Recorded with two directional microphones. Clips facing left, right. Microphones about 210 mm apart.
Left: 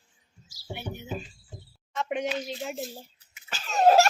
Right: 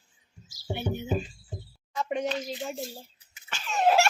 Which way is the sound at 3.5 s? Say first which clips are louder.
Left 4 dB; 40° left (ahead or behind).